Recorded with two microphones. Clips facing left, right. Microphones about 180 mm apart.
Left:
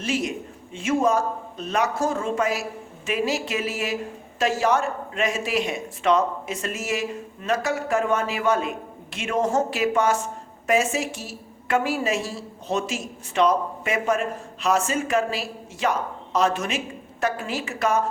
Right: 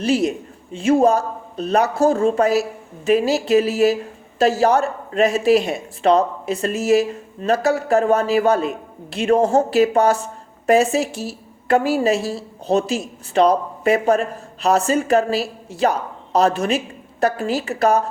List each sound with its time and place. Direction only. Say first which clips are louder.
0.0 s a woman's voice: right 8 dB; 35° right (ahead or behind)